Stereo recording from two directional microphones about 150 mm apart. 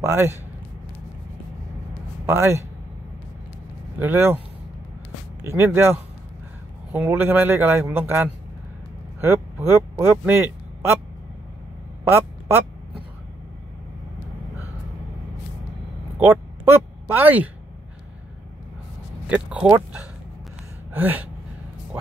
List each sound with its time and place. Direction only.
0.0 s a man's voice: 15° right (ahead or behind)
2.2 s a man's voice: 15° right (ahead or behind)
4.0 s a man's voice: 15° right (ahead or behind)
5.4 s a man's voice: 15° right (ahead or behind)
12.0 s a sound: 15° right (ahead or behind)
16.3 s speech: 15° right (ahead or behind)
19.2 s a man's voice: 10° right (ahead or behind)